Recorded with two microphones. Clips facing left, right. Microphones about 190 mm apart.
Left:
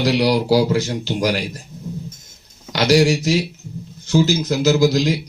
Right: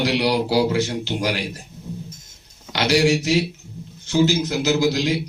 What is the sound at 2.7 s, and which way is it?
Speech, 40° left (ahead or behind).